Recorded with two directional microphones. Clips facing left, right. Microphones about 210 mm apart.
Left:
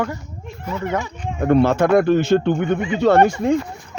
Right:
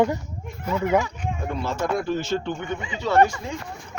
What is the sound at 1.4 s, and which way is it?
Speech, 65° left (ahead or behind).